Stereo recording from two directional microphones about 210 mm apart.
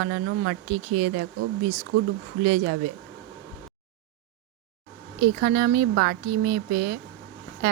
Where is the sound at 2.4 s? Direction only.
50° right (ahead or behind).